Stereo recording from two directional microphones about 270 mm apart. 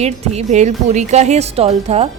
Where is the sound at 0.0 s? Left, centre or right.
Right.